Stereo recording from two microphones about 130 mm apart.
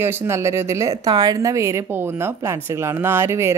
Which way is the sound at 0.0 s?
20° right (ahead or behind).